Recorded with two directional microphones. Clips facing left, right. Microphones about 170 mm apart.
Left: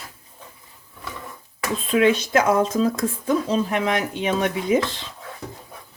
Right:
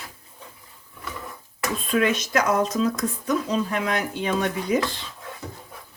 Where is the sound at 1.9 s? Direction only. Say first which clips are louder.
Left 4 dB; 30° left (ahead or behind).